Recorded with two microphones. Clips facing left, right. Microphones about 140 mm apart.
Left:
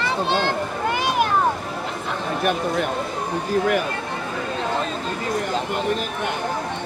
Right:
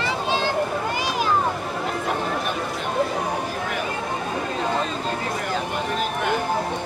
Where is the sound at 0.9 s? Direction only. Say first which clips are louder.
Left 3 dB; 55° left (ahead or behind).